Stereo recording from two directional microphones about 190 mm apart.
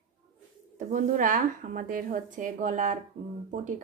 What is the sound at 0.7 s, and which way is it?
A woman's voice, 40° right (ahead or behind).